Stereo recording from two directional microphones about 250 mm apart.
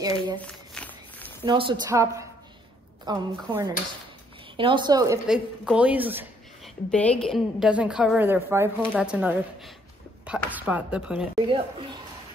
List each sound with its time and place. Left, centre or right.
0.0 s a woman's voice: centre
0.4 s walk: centre
1.4 s a woman's voice: centre
5.2 s speech: centre
6.9 s a woman's voice: centre
11.3 s a woman's voice: centre